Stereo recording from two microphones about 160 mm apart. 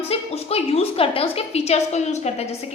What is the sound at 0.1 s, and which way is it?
A woman's voice, 40° left (ahead or behind).